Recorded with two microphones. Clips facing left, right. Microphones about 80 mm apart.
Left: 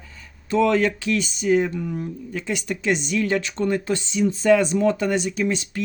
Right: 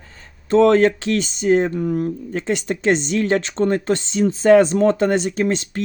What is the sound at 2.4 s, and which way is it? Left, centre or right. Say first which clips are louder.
Speech: right 5 dB; right.